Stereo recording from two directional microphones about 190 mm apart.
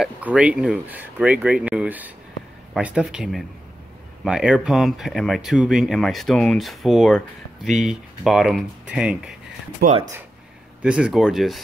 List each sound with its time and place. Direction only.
0.0 s speech: 5° right (ahead or behind)
9.8 s speech: 40° right (ahead or behind)
10.8 s speech: 5° right (ahead or behind)